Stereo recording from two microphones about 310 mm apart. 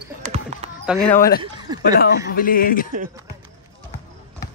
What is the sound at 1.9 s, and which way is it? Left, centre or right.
Speech, left.